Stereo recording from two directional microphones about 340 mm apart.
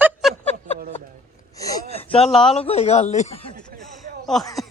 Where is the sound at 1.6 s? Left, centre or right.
Centre.